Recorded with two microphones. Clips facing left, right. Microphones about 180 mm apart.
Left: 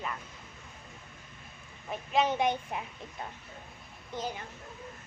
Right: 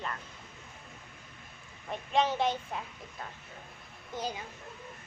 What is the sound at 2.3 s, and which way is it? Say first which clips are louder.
Speech: left 2 dB; 15° left (ahead or behind).